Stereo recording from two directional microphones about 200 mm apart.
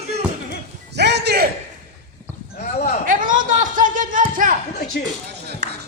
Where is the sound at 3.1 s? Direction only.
40° right (ahead or behind).